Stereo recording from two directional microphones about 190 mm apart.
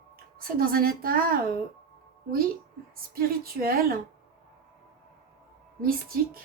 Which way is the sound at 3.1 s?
50° right (ahead or behind).